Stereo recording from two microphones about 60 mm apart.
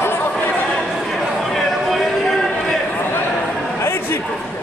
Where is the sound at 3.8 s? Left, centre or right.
Left.